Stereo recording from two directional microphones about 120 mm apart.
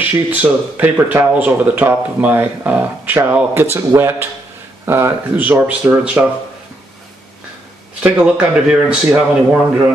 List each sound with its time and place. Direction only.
0.0 s a man's voice: 10° right (ahead or behind)
8.0 s speech: 10° right (ahead or behind)